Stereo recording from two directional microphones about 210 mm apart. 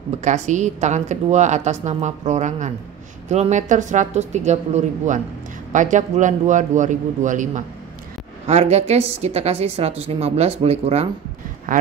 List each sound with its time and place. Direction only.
0.2 s a woman's voice: 35° right (ahead or behind)